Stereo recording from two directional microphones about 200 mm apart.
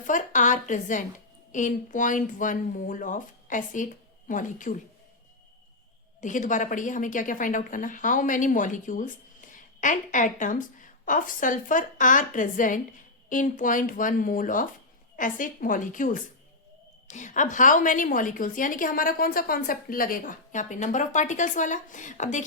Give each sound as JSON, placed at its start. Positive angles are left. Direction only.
{"t": 0.0, "sound": "a woman's voice", "side_deg": 40}
{"t": 6.2, "sound": "a woman's voice", "side_deg": 40}